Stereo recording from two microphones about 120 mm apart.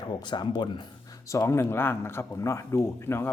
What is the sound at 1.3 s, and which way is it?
Speech, 20° left (ahead or behind).